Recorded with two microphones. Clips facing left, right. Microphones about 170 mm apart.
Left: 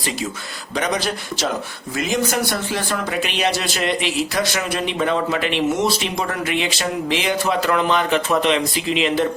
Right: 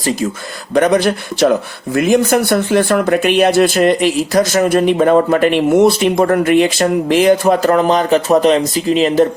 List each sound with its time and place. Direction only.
0.7 s speech: 55° right (ahead or behind)